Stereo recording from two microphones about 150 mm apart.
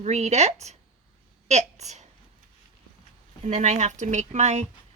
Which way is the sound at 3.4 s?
55° right (ahead or behind).